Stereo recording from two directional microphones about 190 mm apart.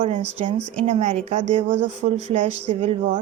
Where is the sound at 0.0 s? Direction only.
30° right (ahead or behind).